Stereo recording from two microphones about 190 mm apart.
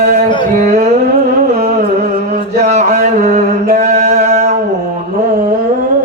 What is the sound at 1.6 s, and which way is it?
Mantra, 40° right (ahead or behind).